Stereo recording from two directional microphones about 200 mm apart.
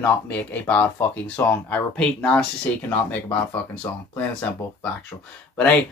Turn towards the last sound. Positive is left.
turn(degrees=5)  # may be behind; listen again after turning